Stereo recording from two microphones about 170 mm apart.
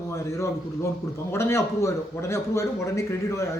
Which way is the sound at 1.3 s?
15° left (ahead or behind).